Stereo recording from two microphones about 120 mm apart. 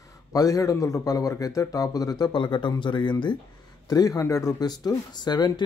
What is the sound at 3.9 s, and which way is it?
Speech, 30° left (ahead or behind).